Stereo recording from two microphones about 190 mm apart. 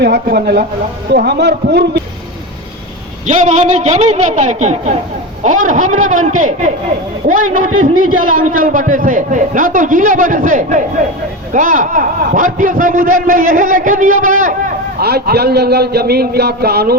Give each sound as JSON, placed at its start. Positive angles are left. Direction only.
{"t": 0.0, "sound": "a man's voice", "side_deg": -60}
{"t": 3.2, "sound": "a man's voice", "side_deg": -40}
{"t": 14.9, "sound": "a man's voice", "side_deg": -55}